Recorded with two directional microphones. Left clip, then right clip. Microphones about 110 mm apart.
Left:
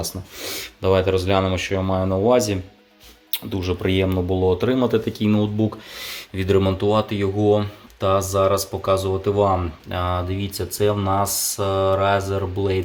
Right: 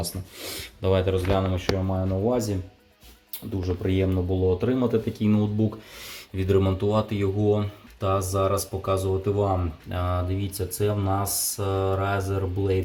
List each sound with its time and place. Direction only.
0.0 s speech: 10° left (ahead or behind)
1.9 s speech: 40° left (ahead or behind)
3.5 s speech: 5° left (ahead or behind)
11.5 s a sound: 5° left (ahead or behind)